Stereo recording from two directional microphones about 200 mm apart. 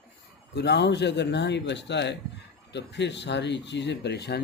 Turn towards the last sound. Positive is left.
turn(degrees=55)  # may be behind; listen again after turning